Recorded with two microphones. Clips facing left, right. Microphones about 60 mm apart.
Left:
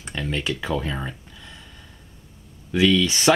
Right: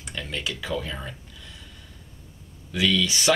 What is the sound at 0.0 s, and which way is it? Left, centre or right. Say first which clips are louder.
Speech: left 5 dB; left.